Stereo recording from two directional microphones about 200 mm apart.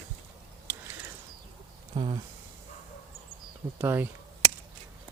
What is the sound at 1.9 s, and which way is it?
Speech, 25° right (ahead or behind).